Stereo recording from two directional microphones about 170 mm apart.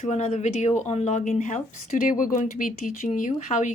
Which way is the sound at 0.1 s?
40° left (ahead or behind).